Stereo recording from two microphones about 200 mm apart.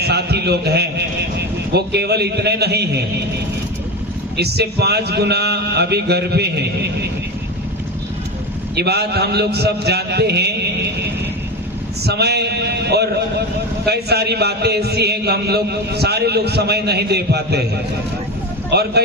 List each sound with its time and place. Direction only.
0.0 s a man's voice: 55° right (ahead or behind)
4.4 s a man's voice: 55° right (ahead or behind)
8.7 s a man's voice: 55° right (ahead or behind)
18.7 s a man's voice: 55° right (ahead or behind)